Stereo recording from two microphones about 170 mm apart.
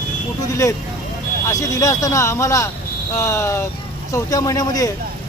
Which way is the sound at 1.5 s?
20° left (ahead or behind).